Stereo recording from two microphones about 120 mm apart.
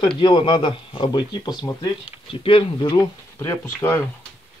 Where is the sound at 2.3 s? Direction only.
50° left (ahead or behind).